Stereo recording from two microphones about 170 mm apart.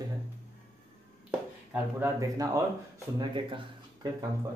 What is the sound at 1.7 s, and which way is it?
Speech, 15° right (ahead or behind).